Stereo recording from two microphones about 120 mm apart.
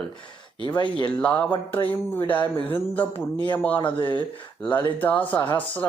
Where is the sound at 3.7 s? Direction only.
40° left (ahead or behind).